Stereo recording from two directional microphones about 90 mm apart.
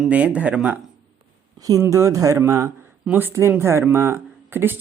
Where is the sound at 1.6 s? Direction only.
40° right (ahead or behind).